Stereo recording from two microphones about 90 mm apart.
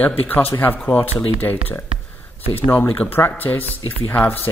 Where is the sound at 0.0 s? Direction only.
20° left (ahead or behind).